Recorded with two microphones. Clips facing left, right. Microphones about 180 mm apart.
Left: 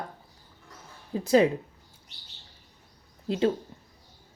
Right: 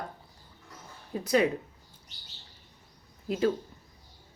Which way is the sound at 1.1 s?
30° left (ahead or behind).